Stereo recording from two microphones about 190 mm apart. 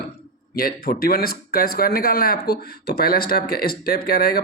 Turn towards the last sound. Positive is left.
turn(degrees=55)  # may be behind; listen again after turning